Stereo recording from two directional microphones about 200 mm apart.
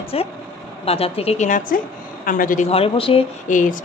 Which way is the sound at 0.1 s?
30° left (ahead or behind).